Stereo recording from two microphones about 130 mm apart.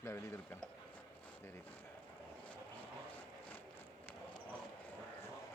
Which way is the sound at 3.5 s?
15° left (ahead or behind).